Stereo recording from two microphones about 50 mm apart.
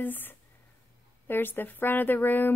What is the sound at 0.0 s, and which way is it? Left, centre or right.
A woman's voice, left.